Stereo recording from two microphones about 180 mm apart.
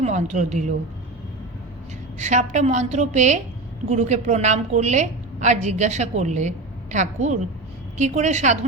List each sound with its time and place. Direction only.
0.0 s a woman's voice: 40° right (ahead or behind)
2.1 s a woman's voice: 40° right (ahead or behind)